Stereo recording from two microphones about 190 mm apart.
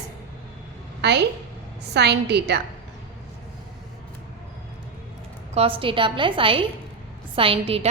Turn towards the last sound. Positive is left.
turn(degrees=-30)  # may be behind; listen again after turning